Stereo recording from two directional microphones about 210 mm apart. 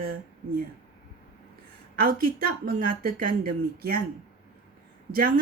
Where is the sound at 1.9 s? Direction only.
45° right (ahead or behind).